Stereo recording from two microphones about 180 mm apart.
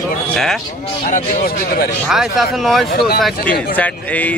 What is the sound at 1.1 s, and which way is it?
Speech, 55° left (ahead or behind).